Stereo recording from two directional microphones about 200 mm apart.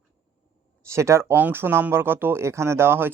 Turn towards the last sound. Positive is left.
turn(degrees=-10)  # may be behind; listen again after turning